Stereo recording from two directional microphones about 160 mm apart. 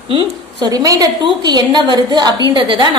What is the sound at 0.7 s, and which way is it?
A woman's voice, 25° right (ahead or behind).